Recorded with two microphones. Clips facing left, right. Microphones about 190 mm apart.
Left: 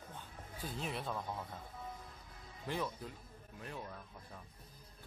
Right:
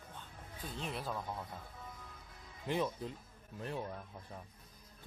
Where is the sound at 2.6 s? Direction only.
20° right (ahead or behind).